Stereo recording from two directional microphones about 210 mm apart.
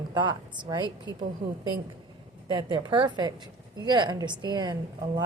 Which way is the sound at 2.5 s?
20° right (ahead or behind).